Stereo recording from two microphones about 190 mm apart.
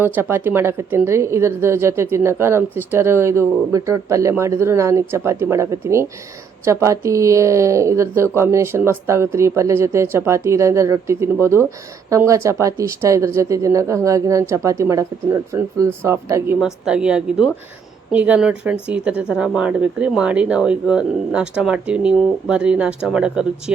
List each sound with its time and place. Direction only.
0.0 s speech: 10° right (ahead or behind)
16.6 s speech: 5° right (ahead or behind)